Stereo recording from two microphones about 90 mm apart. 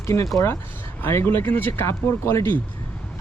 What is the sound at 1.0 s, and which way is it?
Speech, 25° left (ahead or behind).